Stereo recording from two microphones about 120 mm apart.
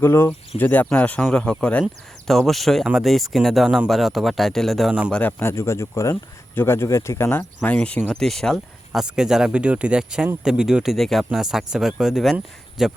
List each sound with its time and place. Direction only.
0.0 s speech: 20° left (ahead or behind); by 4.9 s centre (ahead or behind)
5.4 s speech: 25° left (ahead or behind); by 13.0 s 5° right (ahead or behind)